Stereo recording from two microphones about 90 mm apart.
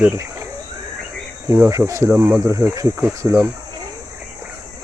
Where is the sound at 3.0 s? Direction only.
20° right (ahead or behind).